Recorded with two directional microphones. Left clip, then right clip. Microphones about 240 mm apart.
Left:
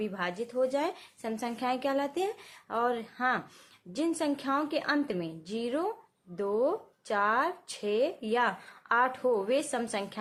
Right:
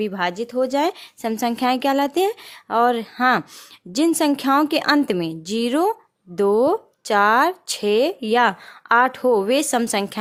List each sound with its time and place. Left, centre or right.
0.0 s a woman's voice: right